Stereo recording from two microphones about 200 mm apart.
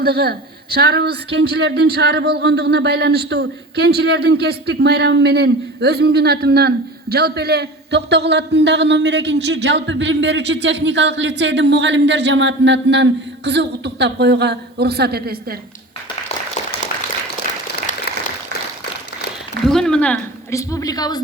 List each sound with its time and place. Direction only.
0.0 s speech: 50° right (ahead or behind)
19.6 s a woman's voice: 5° left (ahead or behind); by 21.2 s 20° left (ahead or behind)